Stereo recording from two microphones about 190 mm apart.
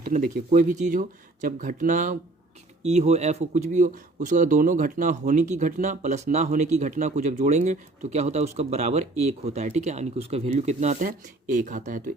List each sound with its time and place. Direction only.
0.0 s speech: 50° right (ahead or behind)